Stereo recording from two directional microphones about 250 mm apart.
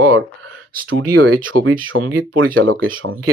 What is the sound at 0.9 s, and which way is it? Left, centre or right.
Speech, right.